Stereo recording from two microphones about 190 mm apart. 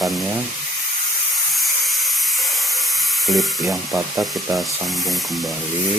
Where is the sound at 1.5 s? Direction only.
Centre (ahead or behind).